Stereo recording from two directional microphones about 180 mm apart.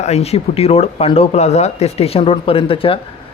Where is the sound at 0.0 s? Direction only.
35° left (ahead or behind).